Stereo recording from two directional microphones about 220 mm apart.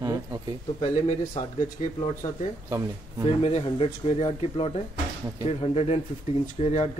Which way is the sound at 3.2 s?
25° left (ahead or behind).